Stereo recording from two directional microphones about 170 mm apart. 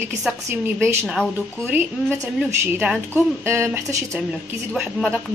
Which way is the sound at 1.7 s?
10° right (ahead or behind).